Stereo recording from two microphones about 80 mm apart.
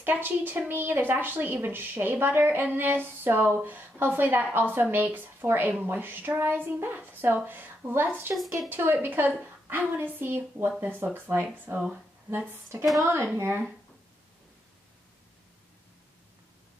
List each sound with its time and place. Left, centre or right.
0.0 s a woman's voice: right